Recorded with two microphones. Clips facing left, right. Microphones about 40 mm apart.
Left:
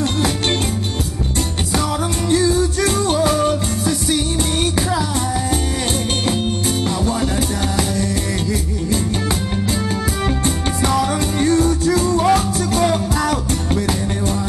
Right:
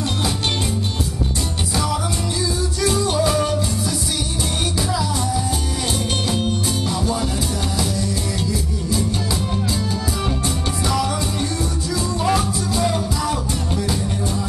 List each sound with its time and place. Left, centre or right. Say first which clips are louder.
2.3 s music: left 7 dB; left
10.9 s music: left 3 dB; left